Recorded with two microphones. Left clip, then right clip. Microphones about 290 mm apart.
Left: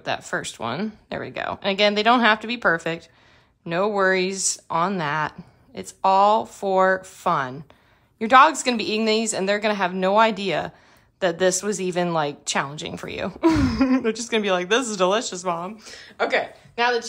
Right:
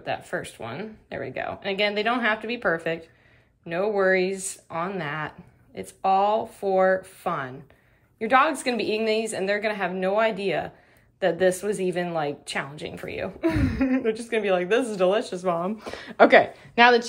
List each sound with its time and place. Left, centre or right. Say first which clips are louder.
0.0 s a woman's voice: left 3 dB; centre
15.8 s a woman's voice: right 8 dB; centre